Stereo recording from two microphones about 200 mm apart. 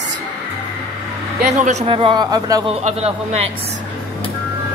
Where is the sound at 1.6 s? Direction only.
30° right (ahead or behind).